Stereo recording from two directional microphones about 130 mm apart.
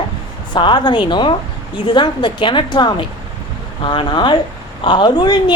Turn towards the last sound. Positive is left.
turn(degrees=35)  # may be behind; listen again after turning